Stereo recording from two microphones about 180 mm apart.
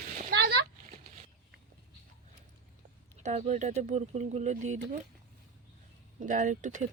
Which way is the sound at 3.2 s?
40° right (ahead or behind).